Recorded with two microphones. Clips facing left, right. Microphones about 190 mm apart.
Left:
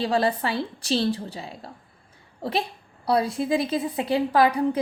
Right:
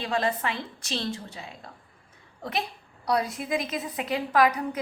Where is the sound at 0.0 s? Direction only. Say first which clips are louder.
Left 4 dB; 35° left (ahead or behind).